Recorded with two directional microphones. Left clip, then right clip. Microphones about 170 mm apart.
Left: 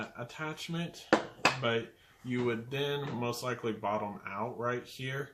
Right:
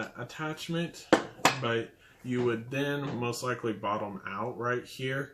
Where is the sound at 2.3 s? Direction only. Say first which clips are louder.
Right 3 dB; 30° left (ahead or behind).